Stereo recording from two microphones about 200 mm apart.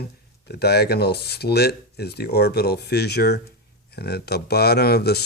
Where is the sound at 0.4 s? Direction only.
55° left (ahead or behind).